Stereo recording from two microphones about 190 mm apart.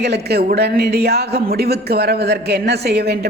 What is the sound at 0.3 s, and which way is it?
A man's voice, 60° right (ahead or behind).